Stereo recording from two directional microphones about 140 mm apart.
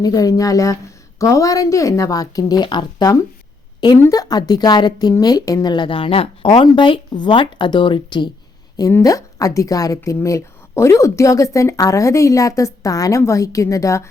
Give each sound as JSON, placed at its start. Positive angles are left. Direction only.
{"t": 0.0, "sound": "a woman's voice", "side_deg": 25}
{"t": 8.7, "sound": "a woman's voice", "side_deg": 25}